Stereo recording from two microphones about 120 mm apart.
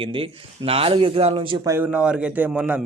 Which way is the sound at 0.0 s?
50° right (ahead or behind).